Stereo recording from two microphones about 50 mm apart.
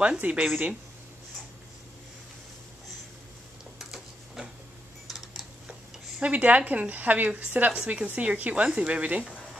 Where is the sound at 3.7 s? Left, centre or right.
Centre.